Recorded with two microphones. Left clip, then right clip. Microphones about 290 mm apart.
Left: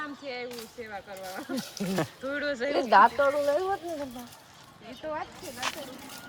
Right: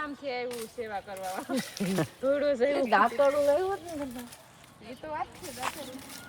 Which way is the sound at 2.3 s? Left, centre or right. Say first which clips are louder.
Right 3 dB; right.